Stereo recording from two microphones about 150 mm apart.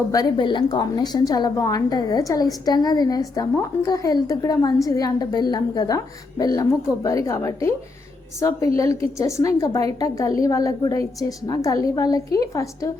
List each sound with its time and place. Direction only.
0.1 s a woman's voice: 30° left (ahead or behind)